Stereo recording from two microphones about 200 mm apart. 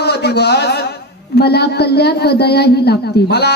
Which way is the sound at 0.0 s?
55° left (ahead or behind).